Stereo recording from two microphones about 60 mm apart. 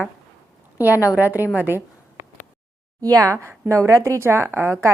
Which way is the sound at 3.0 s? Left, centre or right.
Right.